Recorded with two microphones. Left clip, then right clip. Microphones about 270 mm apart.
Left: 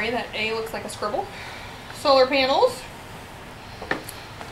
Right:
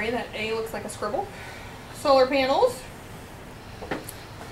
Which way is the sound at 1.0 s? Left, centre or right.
Centre.